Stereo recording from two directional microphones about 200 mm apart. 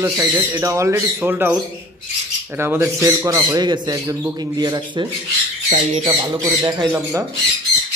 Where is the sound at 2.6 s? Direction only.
15° right (ahead or behind).